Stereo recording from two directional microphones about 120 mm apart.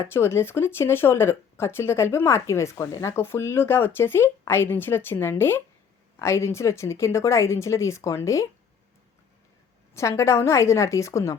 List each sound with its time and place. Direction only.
0.0 s speech: 20° left (ahead or behind)
9.9 s speech: 25° left (ahead or behind)